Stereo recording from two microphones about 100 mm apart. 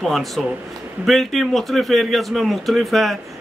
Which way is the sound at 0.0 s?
Centre (ahead or behind).